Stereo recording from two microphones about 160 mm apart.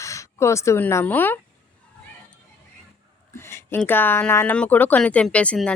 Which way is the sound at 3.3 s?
15° left (ahead or behind).